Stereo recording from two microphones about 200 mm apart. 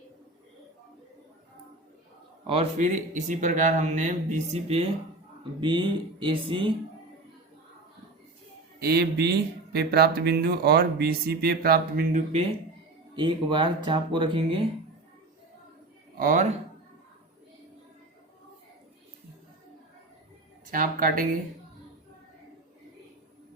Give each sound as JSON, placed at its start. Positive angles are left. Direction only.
{"t": 2.5, "sound": "speech", "side_deg": -30}
{"t": 8.8, "sound": "speech", "side_deg": -55}
{"t": 13.1, "sound": "speech", "side_deg": -25}
{"t": 16.1, "sound": "speech", "side_deg": -45}
{"t": 20.7, "sound": "speech", "side_deg": -45}